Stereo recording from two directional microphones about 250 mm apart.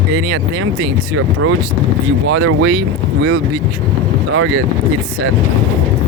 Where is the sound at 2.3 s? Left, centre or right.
Right.